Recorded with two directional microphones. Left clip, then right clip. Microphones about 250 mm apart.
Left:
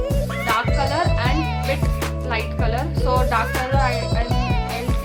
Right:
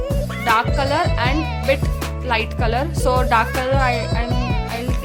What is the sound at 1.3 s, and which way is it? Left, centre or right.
Music, centre.